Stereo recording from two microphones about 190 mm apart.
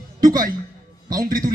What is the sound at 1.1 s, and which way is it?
Speech, 50° right (ahead or behind).